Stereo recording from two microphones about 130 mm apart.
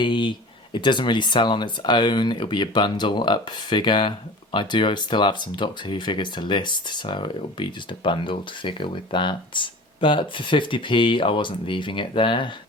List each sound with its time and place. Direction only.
0.0 s speech: 40° left (ahead or behind)